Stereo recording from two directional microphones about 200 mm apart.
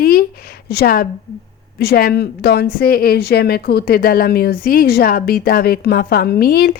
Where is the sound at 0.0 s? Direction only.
50° left (ahead or behind).